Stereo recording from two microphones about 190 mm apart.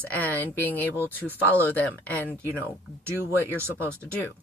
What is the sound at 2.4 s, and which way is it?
Speech, 10° right (ahead or behind).